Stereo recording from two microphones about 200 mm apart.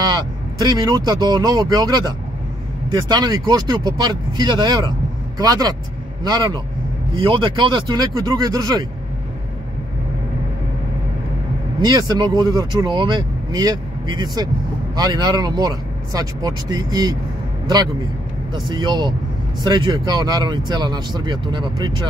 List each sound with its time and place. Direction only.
0.6 s speech: 20° right (ahead or behind)
11.8 s speech: 20° right (ahead or behind)
18.5 s speech: 20° right (ahead or behind)